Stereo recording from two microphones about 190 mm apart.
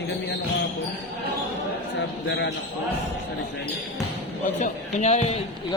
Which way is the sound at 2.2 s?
65° left (ahead or behind).